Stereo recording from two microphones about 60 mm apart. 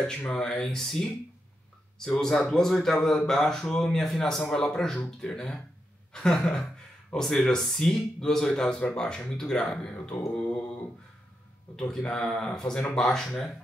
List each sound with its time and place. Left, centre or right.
0.3 s a man's voice: centre
10.3 s mantra: left
12.0 s a man's voice: centre